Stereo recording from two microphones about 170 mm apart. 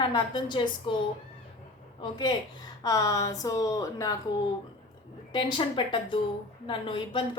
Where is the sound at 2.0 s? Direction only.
25° left (ahead or behind).